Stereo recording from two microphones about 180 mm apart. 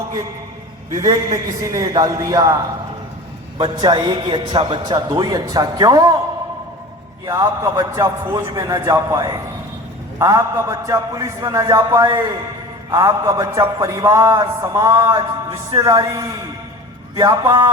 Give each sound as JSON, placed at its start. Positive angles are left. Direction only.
{"t": 1.0, "sound": "a man's voice", "side_deg": -20}
{"t": 3.6, "sound": "a man's voice", "side_deg": -25}
{"t": 7.3, "sound": "a man's voice", "side_deg": -15}